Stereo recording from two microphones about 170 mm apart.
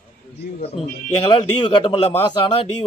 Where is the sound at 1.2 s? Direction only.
30° left (ahead or behind).